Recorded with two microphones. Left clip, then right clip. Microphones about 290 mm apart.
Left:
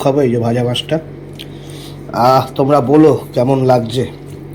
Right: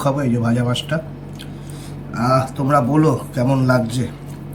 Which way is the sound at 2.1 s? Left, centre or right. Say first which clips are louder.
Left 8 dB; left.